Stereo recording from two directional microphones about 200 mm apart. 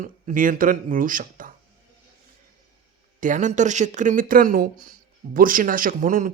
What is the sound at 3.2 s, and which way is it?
Speech, 40° right (ahead or behind).